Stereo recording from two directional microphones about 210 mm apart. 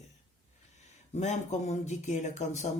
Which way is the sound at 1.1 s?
35° left (ahead or behind).